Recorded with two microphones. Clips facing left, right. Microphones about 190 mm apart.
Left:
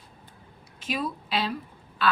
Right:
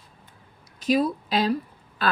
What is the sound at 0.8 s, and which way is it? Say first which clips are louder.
Speech: right 9 dB; 40° right (ahead or behind).